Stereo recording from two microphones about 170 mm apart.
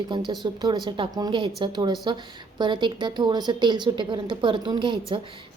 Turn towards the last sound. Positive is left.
turn(degrees=-30)  # may be behind; listen again after turning